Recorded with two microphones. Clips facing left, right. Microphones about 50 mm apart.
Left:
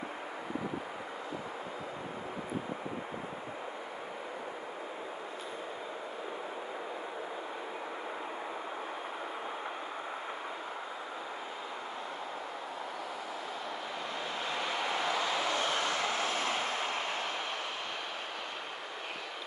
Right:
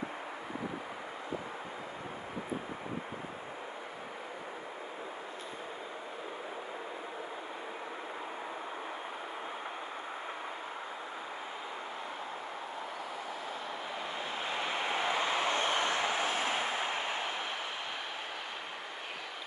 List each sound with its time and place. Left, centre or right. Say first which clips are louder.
14.4 s vehicle: even; centre